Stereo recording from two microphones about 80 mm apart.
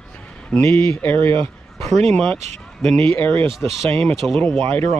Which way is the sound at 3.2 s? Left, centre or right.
Left.